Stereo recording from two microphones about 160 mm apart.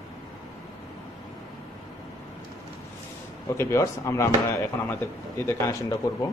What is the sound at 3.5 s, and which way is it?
Speech, 15° left (ahead or behind).